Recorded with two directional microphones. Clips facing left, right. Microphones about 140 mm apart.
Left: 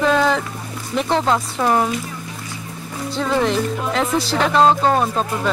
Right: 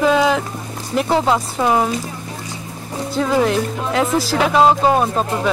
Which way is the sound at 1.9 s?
30° right (ahead or behind).